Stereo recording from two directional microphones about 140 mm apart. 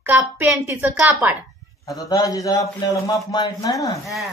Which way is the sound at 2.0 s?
25° left (ahead or behind).